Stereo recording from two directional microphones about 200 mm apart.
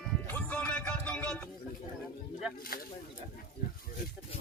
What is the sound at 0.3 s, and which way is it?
Music, 10° left (ahead or behind).